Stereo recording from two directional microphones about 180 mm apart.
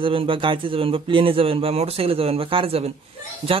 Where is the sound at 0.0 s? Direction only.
30° right (ahead or behind).